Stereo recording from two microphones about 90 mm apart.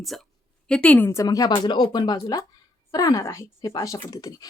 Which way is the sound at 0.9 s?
25° left (ahead or behind).